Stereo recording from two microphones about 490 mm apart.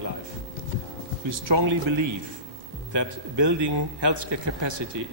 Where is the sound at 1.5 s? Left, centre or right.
Right.